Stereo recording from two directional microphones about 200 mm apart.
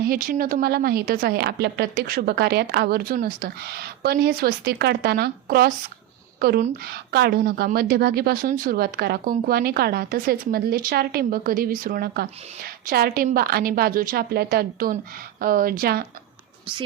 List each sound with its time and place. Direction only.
0.0 s a woman's voice: 45° right (ahead or behind)